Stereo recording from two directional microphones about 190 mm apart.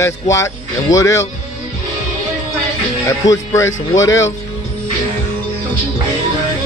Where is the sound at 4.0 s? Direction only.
80° left.